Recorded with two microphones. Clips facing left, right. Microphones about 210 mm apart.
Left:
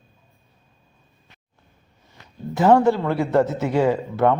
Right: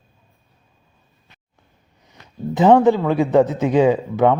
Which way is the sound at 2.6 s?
15° right (ahead or behind).